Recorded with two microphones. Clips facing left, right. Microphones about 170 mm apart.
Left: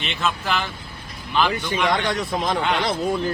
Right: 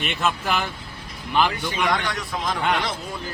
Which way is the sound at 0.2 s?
10° right (ahead or behind).